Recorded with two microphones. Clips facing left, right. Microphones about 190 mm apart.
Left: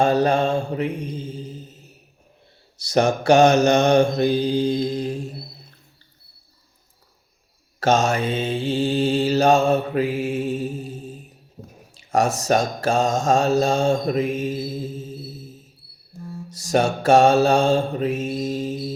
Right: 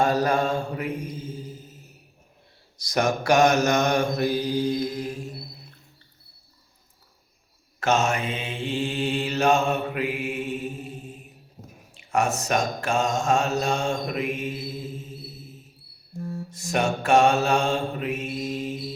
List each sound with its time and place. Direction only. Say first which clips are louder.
0.3 s mantra: left 4 dB; 25° left (ahead or behind)
0.9 s mantra: left 3 dB; 70° left (ahead or behind)
2.7 s mantra: left 5 dB; 30° left (ahead or behind)
7.9 s mantra: left 4 dB; 35° left (ahead or behind)
16.6 s mantra: left 5 dB; 40° left (ahead or behind)